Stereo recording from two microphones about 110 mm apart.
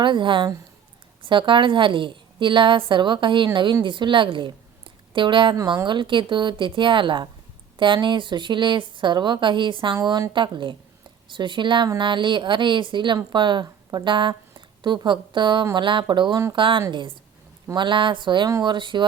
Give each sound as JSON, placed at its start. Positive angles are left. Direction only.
{"t": 0.0, "sound": "a woman's voice", "side_deg": -45}